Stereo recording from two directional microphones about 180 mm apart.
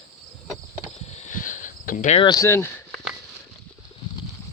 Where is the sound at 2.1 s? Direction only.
20° left (ahead or behind).